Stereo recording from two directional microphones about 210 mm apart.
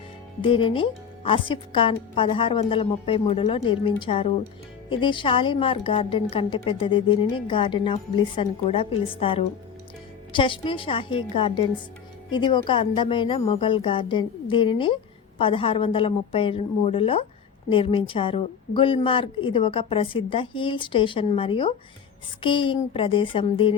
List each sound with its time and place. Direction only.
0.4 s a woman's voice: 25° left (ahead or behind)